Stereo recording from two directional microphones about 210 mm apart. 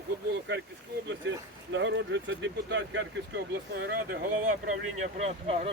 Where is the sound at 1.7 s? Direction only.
60° right (ahead or behind).